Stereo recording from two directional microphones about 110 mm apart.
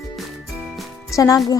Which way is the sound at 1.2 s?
30° left (ahead or behind).